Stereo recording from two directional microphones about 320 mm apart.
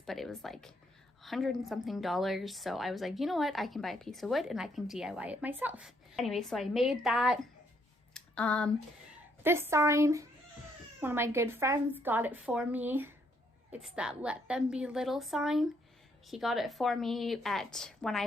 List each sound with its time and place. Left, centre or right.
0.0 s speech: centre
8.1 s a sound: centre
9.4 s a woman's voice: centre